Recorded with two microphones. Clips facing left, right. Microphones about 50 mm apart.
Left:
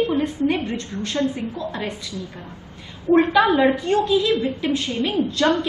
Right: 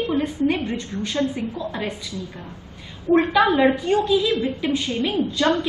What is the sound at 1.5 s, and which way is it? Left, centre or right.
Speech, centre.